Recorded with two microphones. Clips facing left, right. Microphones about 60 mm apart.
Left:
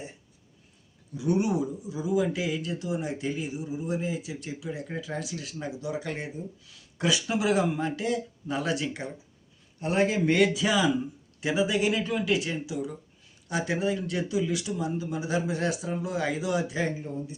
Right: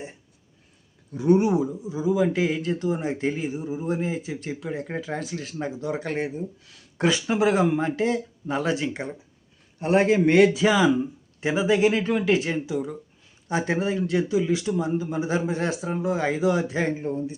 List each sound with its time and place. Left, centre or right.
1.1 s speech: right
1.4 s speech: right